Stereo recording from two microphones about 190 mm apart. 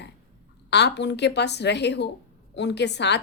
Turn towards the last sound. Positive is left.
turn(degrees=65)  # may be behind; listen again after turning